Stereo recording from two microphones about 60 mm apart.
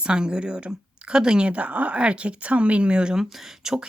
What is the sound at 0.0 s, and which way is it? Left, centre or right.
Speech, centre.